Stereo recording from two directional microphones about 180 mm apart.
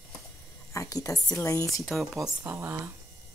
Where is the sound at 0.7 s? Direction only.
20° left (ahead or behind).